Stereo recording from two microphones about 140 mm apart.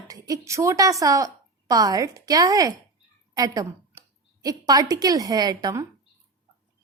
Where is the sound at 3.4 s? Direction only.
25° right (ahead or behind).